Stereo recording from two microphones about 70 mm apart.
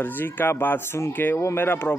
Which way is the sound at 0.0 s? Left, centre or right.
Left.